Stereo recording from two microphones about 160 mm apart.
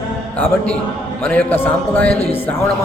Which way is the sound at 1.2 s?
10° left (ahead or behind).